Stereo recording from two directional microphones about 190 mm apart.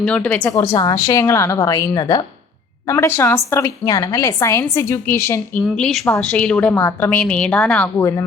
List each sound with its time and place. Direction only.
0.0 s a woman's voice: 5° left (ahead or behind)